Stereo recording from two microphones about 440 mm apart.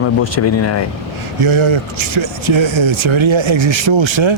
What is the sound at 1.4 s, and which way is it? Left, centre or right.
Speech, right.